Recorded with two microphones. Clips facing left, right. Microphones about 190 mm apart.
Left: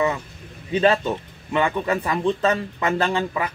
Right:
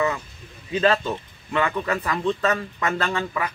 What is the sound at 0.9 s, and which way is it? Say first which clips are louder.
Speech: left 2 dB; 20° left (ahead or behind).